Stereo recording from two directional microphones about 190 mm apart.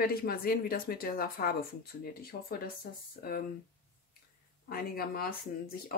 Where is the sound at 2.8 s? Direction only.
55° left (ahead or behind).